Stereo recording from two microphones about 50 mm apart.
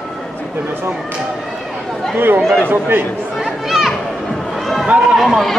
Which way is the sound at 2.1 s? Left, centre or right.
Right.